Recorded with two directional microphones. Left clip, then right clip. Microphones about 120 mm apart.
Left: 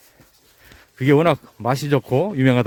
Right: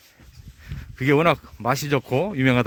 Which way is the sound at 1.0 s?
35° left (ahead or behind).